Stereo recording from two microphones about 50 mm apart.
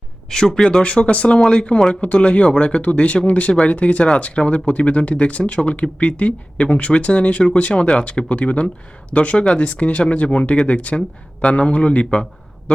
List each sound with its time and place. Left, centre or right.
0.3 s speech: centre
0.8 s speech: left